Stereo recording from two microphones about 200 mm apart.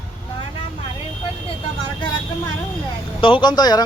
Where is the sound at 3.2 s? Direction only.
25° left (ahead or behind).